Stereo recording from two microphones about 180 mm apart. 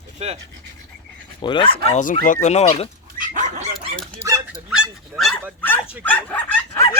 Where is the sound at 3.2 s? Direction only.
45° right (ahead or behind).